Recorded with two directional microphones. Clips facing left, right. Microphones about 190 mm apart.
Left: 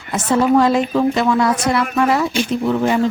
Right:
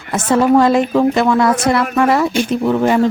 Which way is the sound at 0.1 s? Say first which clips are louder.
Right 2 dB; 55° right (ahead or behind).